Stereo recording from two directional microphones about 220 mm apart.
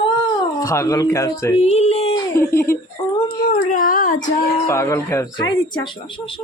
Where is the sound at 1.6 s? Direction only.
30° left (ahead or behind).